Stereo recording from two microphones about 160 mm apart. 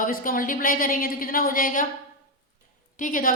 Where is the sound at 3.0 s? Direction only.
55° left (ahead or behind).